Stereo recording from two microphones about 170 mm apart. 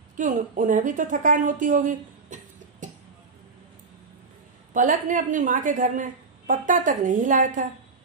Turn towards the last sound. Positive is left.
turn(degrees=-50)  # may be behind; listen again after turning